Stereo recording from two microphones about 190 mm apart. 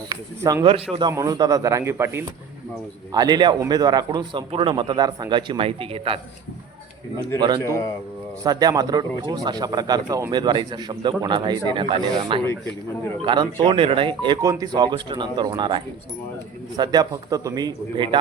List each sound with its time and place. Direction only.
0.1 s speech: 20° right (ahead or behind)
7.3 s speech: 25° right (ahead or behind)